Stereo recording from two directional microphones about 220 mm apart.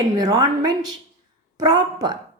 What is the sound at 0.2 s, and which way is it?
A woman's voice, 15° right (ahead or behind).